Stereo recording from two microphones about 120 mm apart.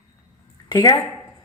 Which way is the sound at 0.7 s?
35° left (ahead or behind).